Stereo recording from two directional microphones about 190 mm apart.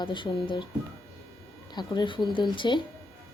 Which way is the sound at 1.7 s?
25° left (ahead or behind).